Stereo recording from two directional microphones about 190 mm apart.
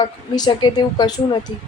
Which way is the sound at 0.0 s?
20° left (ahead or behind).